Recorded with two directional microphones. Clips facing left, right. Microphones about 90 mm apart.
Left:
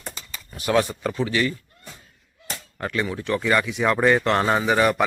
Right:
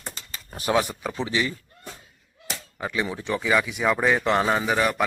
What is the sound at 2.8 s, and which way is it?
A man's voice, 10° right (ahead or behind).